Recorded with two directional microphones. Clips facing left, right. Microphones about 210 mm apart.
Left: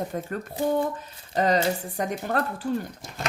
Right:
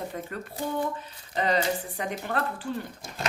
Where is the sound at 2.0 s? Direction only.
40° left (ahead or behind).